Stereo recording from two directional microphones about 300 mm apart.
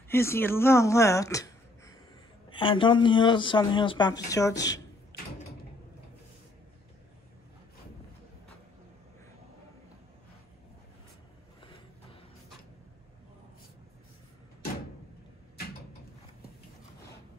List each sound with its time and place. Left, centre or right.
0.1 s speech: centre